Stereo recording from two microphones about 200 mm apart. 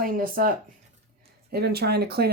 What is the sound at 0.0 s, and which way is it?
Speech, 45° right (ahead or behind).